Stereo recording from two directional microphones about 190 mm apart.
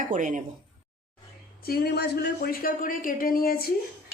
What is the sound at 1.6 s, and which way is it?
A man's voice, 55° left (ahead or behind).